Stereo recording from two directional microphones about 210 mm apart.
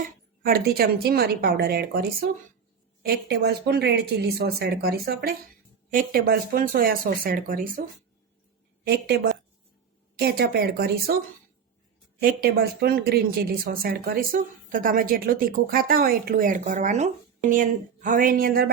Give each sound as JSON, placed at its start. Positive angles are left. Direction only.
{"t": 0.4, "sound": "a woman's voice", "side_deg": -45}
{"t": 8.9, "sound": "a woman's voice", "side_deg": -50}
{"t": 12.2, "sound": "a woman's voice", "side_deg": -45}